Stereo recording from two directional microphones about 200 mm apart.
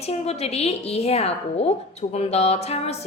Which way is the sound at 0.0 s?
30° left (ahead or behind).